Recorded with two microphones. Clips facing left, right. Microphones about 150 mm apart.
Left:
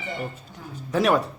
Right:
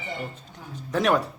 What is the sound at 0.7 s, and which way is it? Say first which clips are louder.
Speech: left 2 dB; centre (ahead or behind).